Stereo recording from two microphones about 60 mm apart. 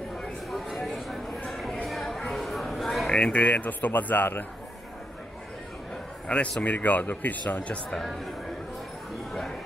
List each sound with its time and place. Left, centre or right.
0.2 s a sound: centre
3.1 s speech: centre
6.2 s a man's voice: left
7.9 s speech: centre